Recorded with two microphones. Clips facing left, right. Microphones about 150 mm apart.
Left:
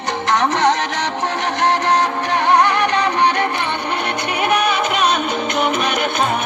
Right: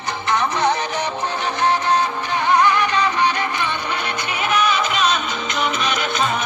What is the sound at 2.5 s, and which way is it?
Music, 65° left (ahead or behind).